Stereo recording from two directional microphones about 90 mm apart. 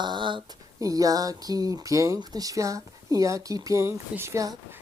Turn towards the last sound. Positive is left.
turn(degrees=-40)  # may be behind; listen again after turning